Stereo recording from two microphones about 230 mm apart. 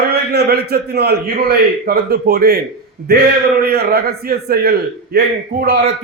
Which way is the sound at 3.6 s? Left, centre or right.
Right.